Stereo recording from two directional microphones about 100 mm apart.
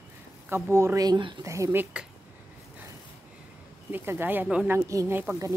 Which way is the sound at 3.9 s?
20° right (ahead or behind).